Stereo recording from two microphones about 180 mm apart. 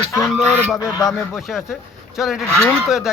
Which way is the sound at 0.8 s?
20° left (ahead or behind).